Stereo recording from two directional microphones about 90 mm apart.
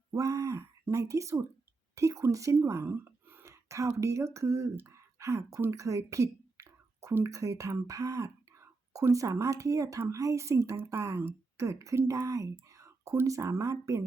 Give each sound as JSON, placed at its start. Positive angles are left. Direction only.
{"t": 0.1, "sound": "speech", "side_deg": -40}